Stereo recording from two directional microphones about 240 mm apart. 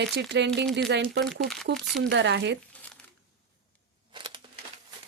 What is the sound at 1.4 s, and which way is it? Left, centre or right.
Speech, centre.